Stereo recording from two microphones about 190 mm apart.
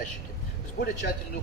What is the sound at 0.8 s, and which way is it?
Speech, 60° left (ahead or behind).